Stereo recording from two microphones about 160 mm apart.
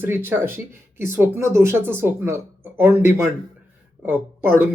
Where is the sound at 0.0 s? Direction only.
15° right (ahead or behind).